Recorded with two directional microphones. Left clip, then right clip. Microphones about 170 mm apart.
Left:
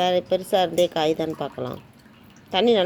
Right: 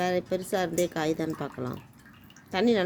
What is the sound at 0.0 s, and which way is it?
Speech, 15° right (ahead or behind).